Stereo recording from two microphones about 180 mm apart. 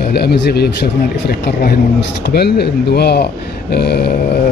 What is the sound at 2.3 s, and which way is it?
Speech, 65° left (ahead or behind).